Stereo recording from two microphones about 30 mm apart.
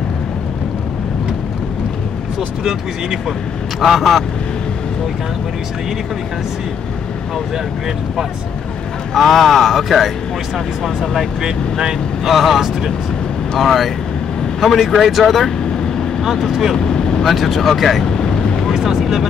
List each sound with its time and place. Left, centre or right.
3.8 s speech: centre
9.1 s speech: centre
12.3 s speech: centre
16.4 s speech: centre
16.7 s vehicle: left
17.3 s speech: centre
18.7 s vehicle: centre